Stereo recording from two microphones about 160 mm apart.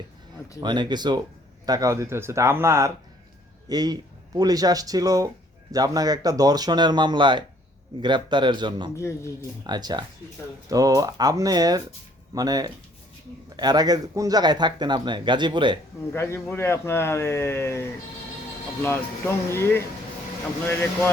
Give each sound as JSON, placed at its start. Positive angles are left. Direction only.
{"t": 0.6, "sound": "speech", "side_deg": -30}
{"t": 9.0, "sound": "speech", "side_deg": 15}
{"t": 9.6, "sound": "speech", "side_deg": -25}
{"t": 16.1, "sound": "speech", "side_deg": 15}